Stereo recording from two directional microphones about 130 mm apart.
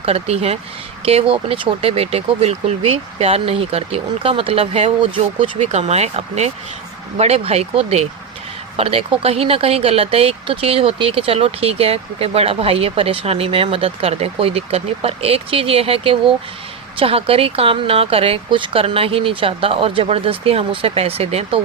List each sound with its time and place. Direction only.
0.0 s speech: 50° right (ahead or behind)
5.5 s speech: 60° right (ahead or behind)